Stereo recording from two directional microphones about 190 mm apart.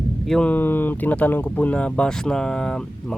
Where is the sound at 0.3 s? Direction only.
5° left (ahead or behind).